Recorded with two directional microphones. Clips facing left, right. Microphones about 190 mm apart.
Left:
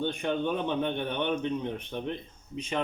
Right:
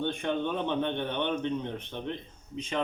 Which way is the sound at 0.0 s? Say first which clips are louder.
Left 1 dB; 10° left (ahead or behind).